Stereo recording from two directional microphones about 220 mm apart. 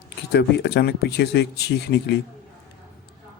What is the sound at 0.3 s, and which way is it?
Speech, 50° left (ahead or behind).